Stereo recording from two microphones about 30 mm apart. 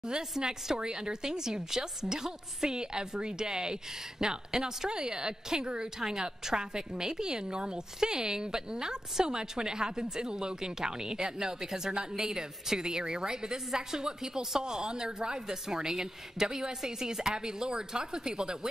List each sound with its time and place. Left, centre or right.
0.4 s a woman's voice: right